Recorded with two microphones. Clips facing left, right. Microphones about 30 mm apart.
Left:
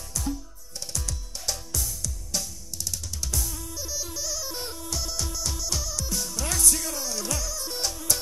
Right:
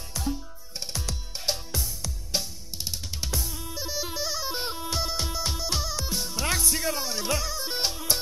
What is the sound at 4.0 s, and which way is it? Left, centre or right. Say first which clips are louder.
Music: right 4 dB; right.